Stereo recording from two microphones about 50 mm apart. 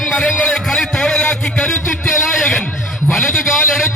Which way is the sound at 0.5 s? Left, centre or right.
Centre.